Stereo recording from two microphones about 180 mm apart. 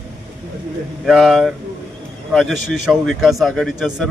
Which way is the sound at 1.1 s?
Centre (ahead or behind).